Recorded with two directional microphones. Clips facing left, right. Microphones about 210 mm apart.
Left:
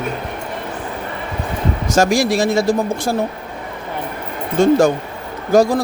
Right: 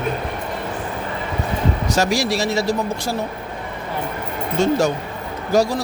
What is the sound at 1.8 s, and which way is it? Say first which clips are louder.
Speech: left 6 dB; 50° left (ahead or behind).